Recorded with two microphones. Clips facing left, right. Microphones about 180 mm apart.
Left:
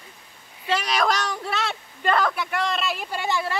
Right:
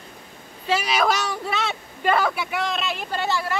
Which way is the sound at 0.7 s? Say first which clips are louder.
Right 2 dB; 5° right (ahead or behind).